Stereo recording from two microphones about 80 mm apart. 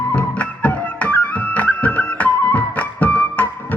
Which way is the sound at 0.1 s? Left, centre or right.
Centre.